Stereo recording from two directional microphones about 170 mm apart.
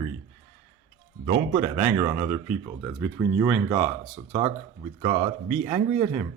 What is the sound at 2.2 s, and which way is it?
Speech, 10° right (ahead or behind).